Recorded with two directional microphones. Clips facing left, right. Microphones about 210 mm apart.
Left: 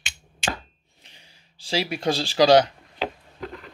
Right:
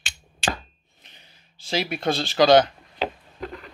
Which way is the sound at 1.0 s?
30° left (ahead or behind).